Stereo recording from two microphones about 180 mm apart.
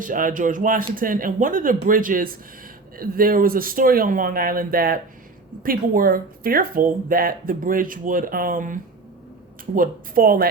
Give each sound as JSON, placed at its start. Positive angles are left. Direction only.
{"t": 0.0, "sound": "speech", "side_deg": -45}